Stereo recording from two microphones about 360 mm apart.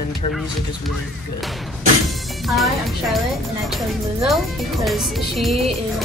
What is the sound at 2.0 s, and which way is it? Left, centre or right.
Music, centre.